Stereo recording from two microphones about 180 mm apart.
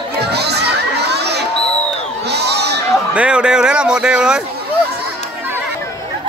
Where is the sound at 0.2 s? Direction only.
65° right (ahead or behind).